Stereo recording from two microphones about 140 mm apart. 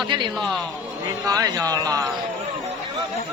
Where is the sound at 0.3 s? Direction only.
5° left (ahead or behind).